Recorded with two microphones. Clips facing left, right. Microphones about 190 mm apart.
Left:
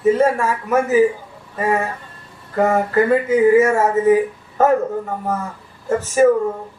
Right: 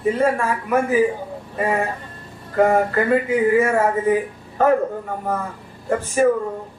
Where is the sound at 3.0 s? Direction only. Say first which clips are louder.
Left 3 dB; 40° left (ahead or behind).